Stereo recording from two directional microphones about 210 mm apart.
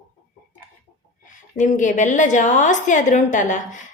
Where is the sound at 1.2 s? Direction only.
35° left (ahead or behind).